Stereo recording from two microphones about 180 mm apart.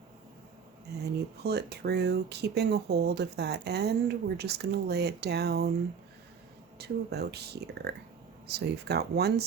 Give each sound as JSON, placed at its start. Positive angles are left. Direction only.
{"t": 1.5, "sound": "speech", "side_deg": -65}
{"t": 6.7, "sound": "speech", "side_deg": -65}